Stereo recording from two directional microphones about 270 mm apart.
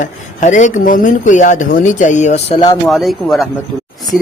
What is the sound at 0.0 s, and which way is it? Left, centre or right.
Speech, left.